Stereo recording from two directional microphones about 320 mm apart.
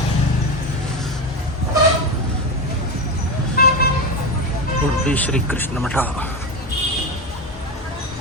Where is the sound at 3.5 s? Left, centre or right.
Left.